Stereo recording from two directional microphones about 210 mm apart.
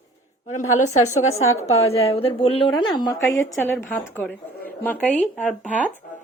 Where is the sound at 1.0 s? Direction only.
35° left (ahead or behind); by 4.0 s 10° left (ahead or behind).